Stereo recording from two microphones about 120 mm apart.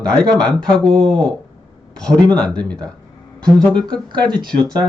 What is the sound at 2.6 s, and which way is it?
Speech, 10° left (ahead or behind).